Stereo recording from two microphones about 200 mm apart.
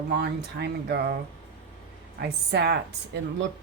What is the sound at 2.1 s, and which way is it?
Speech, 55° right (ahead or behind).